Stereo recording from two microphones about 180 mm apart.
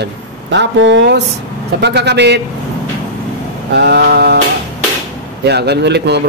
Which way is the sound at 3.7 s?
70° right (ahead or behind).